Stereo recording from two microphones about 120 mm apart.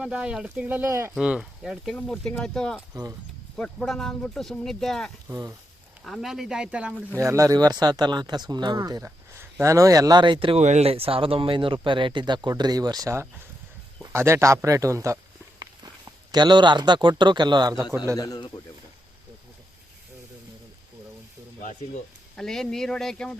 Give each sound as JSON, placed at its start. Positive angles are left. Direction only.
{"t": 0.0, "sound": "speech", "side_deg": -10}
{"t": 0.9, "sound": "speech", "side_deg": -25}
{"t": 1.1, "sound": "speech", "side_deg": -5}
{"t": 5.3, "sound": "speech", "side_deg": -25}
{"t": 6.1, "sound": "speech", "side_deg": 0}
{"t": 7.2, "sound": "speech", "side_deg": -25}
{"t": 10.6, "sound": "speech", "side_deg": -70}
{"t": 14.0, "sound": "a sound", "side_deg": -20}
{"t": 16.3, "sound": "speech", "side_deg": -40}
{"t": 18.2, "sound": "speech", "side_deg": 35}
{"t": 22.4, "sound": "speech", "side_deg": 5}